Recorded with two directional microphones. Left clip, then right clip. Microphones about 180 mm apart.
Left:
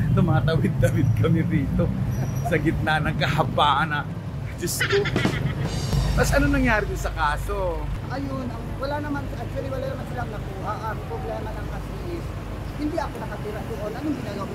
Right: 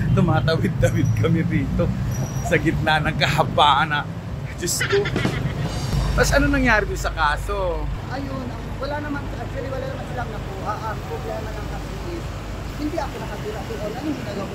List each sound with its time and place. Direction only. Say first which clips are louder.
0.1 s speech: right 4 dB; 5° right (ahead or behind)
5.9 s music: right 4 dB; centre (ahead or behind)
6.5 s speech: right 4 dB; 15° right (ahead or behind)